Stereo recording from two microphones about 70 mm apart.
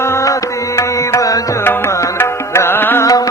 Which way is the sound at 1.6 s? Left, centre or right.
Left.